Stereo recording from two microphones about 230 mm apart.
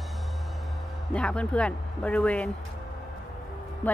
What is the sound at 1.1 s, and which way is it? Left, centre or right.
Speech, centre.